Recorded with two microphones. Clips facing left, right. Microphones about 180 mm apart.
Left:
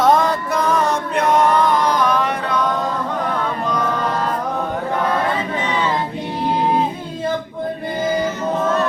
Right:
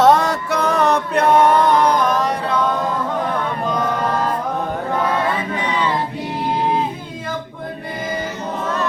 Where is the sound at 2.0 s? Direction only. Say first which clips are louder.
Even; 45° right (ahead or behind).